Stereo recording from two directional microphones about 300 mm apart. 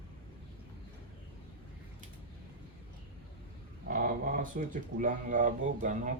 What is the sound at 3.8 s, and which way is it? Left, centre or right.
Speech, right.